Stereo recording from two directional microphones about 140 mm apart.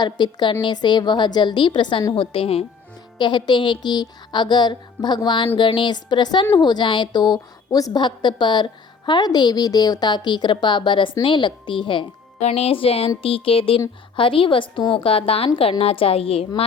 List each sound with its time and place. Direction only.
0.0 s a woman's voice: 30° left (ahead or behind)
12.4 s a woman's voice: 50° left (ahead or behind)